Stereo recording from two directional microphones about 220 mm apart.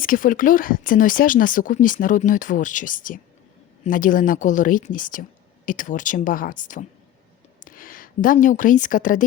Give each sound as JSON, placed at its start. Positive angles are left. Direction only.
{"t": 0.0, "sound": "a woman's voice", "side_deg": 40}